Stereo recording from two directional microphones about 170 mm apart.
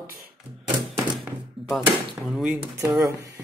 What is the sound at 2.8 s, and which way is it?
Speech, 20° right (ahead or behind).